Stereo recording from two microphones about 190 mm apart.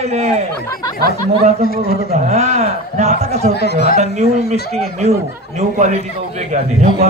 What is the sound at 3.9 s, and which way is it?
A man's voice, 35° right (ahead or behind).